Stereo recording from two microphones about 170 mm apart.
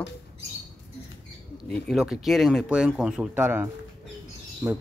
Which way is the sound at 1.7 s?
Centre (ahead or behind).